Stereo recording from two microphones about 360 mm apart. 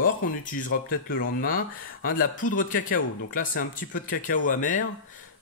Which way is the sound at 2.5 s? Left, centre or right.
Left.